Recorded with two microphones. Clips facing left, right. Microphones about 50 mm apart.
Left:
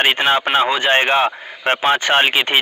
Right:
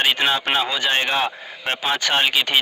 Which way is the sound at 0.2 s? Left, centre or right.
Left.